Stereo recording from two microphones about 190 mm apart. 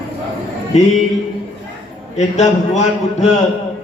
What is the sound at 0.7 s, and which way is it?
Speech, 35° left (ahead or behind).